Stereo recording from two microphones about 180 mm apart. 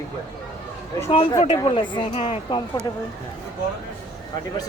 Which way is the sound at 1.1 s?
30° left (ahead or behind).